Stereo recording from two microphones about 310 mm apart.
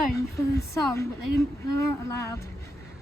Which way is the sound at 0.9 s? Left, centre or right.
Centre.